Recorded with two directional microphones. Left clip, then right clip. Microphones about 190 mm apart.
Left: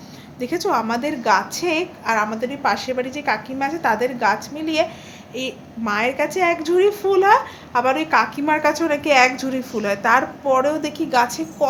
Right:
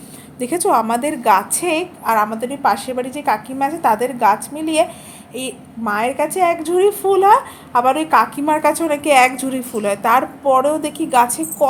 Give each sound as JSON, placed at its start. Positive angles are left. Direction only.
{"t": 0.3, "sound": "a woman's voice", "side_deg": -20}